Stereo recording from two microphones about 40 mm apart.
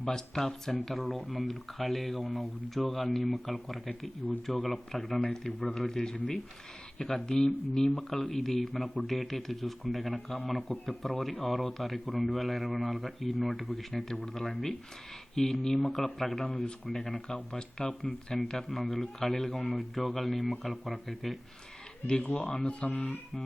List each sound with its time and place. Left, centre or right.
0.3 s speech: centre
17.2 s speech: left
18.4 s speech: centre
22.0 s speech: left
22.4 s speech: centre
22.6 s speech: left
22.9 s speech: centre